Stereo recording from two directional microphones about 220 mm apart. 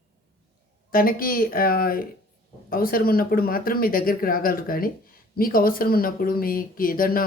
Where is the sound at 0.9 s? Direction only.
40° left (ahead or behind).